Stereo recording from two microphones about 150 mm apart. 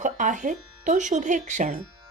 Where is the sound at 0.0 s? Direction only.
55° right (ahead or behind).